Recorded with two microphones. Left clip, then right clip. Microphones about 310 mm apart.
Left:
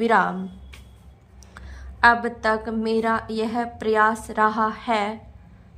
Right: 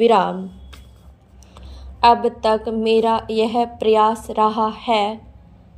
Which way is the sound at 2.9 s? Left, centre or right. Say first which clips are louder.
Right 5 dB; centre.